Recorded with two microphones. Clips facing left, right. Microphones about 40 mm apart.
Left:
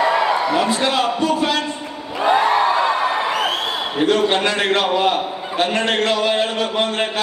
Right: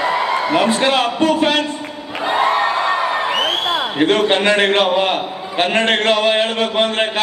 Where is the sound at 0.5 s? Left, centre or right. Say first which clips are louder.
Right 3 dB; right.